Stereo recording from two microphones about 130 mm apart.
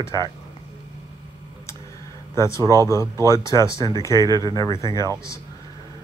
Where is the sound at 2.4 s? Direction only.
25° left (ahead or behind).